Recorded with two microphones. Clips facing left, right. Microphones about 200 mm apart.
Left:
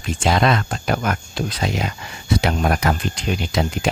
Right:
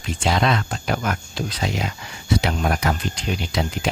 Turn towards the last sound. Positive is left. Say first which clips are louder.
# left 3 dB
turn(degrees=50)  # may be behind; listen again after turning